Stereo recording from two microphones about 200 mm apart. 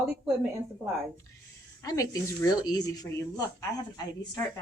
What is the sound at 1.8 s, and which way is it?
Speech, 15° left (ahead or behind).